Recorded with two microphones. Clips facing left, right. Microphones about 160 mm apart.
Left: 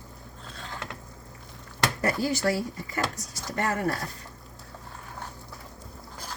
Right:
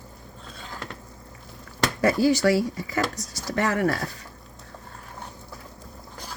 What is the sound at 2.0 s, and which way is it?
Speech, 90° right.